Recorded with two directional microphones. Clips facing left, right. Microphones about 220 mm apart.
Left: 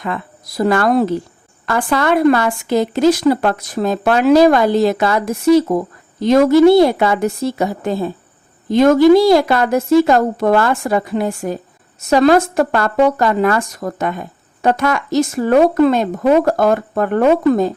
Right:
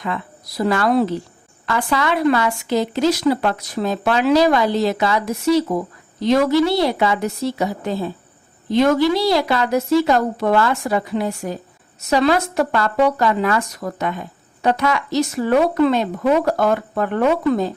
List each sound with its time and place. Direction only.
0.0 s speech: 50° left (ahead or behind)